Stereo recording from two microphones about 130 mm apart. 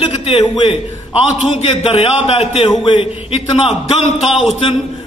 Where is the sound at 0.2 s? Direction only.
45° left (ahead or behind).